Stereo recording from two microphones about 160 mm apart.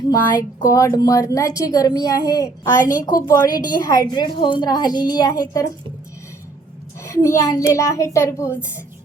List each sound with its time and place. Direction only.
0.6 s a woman's voice: 20° left (ahead or behind)
7.0 s a woman's voice: 20° left (ahead or behind)